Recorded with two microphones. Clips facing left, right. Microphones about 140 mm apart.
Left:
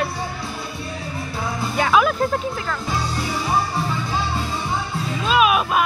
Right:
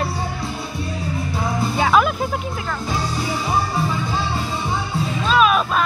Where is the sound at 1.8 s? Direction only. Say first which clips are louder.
Left 1 dB; centre (ahead or behind).